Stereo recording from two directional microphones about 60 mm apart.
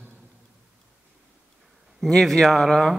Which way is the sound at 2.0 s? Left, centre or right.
Centre.